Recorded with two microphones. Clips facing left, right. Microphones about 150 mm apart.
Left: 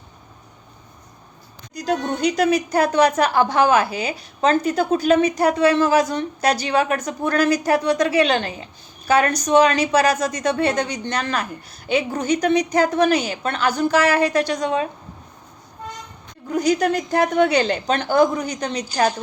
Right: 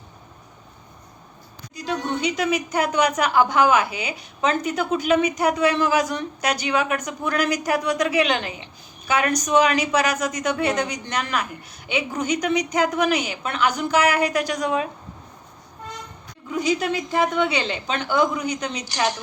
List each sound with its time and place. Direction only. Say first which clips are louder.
1.7 s a woman's voice: left 3 dB; 40° left (ahead or behind)
16.5 s a woman's voice: left 4 dB; 40° left (ahead or behind)